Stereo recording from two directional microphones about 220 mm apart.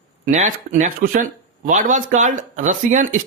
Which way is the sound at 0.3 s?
35° right (ahead or behind).